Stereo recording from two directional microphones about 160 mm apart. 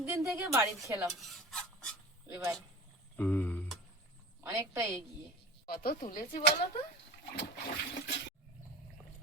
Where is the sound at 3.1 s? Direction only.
10° left (ahead or behind).